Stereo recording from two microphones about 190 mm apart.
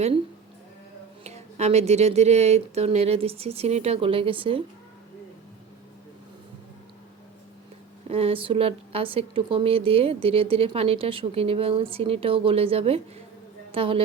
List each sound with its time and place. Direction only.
1.2 s speech: 35° right (ahead or behind)
8.1 s a woman's voice: 30° right (ahead or behind)